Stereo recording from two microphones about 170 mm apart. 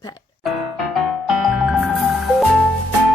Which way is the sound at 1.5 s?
Centre (ahead or behind).